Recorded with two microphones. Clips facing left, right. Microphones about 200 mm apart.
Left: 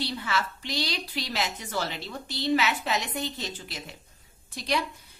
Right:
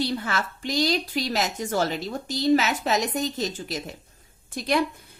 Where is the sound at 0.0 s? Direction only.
45° right (ahead or behind).